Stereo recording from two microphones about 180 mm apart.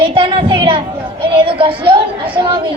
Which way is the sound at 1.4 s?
30° right (ahead or behind).